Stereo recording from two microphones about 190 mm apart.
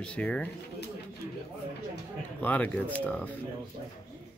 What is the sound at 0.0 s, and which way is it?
Speech, 5° left (ahead or behind).